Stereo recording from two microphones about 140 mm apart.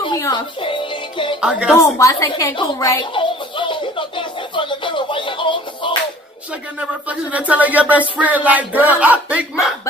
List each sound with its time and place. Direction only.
0.0 s music: 30° left (ahead or behind)
1.4 s speech: 5° right (ahead or behind)
2.0 s a woman's voice: 25° left (ahead or behind)
3.0 s music: 35° left (ahead or behind)
6.8 s speech: 10° right (ahead or behind)